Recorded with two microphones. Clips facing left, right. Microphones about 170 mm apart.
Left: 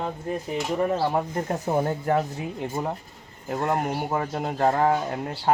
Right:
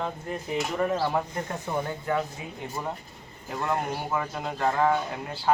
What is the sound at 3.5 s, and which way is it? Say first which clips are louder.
Speech: left 4 dB; 45° left (ahead or behind).